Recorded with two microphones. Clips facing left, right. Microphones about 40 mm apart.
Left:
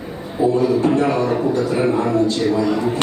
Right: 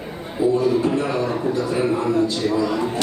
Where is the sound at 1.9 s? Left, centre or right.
Left.